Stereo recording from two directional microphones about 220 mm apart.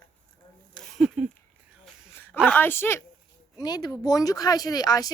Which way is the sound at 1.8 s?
10° left (ahead or behind).